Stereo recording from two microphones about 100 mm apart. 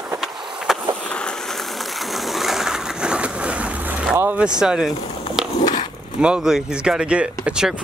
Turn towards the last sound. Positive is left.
turn(degrees=-5)  # may be behind; listen again after turning